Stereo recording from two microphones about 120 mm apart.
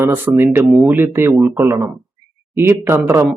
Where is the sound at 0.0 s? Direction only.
20° right (ahead or behind).